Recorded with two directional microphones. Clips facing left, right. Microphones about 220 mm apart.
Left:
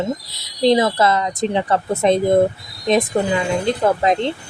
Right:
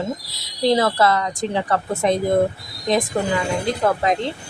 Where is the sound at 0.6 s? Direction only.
20° left (ahead or behind).